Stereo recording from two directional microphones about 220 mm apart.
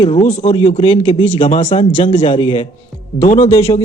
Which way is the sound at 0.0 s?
25° left (ahead or behind).